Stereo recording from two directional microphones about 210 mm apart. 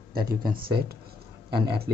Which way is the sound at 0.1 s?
45° right (ahead or behind).